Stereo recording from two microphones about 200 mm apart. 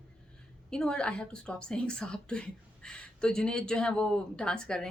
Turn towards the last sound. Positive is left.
turn(degrees=5)  # may be behind; listen again after turning